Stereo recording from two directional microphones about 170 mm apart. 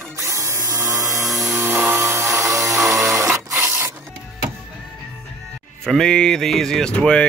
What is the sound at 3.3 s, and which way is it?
Printer, 15° right (ahead or behind).